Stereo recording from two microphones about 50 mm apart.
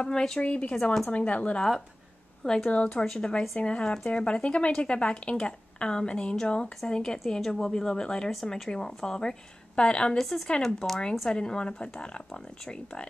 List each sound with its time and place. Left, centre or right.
0.0 s a woman's voice: centre
0.4 s speech: left
2.4 s a woman's voice: centre
10.1 s speech: centre
10.8 s a woman's voice: left